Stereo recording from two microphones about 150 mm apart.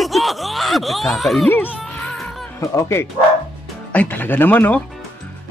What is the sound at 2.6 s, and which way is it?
Speech, 20° left (ahead or behind).